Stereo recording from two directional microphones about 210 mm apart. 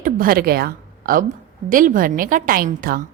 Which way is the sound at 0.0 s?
45° right (ahead or behind).